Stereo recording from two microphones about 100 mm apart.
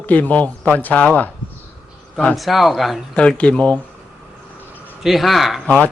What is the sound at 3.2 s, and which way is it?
Speech, 10° left (ahead or behind).